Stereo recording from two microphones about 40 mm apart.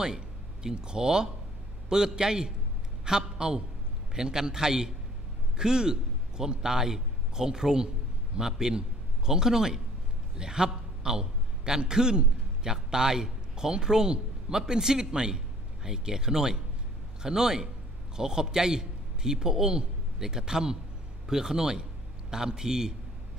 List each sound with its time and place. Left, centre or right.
0.0 s a man's voice: centre